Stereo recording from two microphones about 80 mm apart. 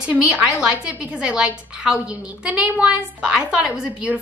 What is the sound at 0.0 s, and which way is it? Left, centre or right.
A woman's voice, centre.